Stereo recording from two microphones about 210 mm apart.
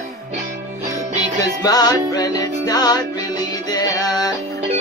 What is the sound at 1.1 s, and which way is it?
Music, 15° left (ahead or behind).